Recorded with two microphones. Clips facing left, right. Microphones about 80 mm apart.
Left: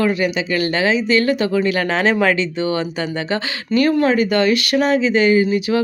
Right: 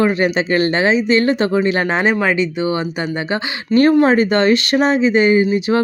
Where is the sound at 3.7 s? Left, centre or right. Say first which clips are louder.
Right 4 dB; right.